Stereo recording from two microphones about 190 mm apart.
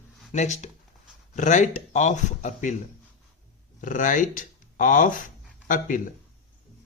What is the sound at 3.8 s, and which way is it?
Speech, 45° left (ahead or behind).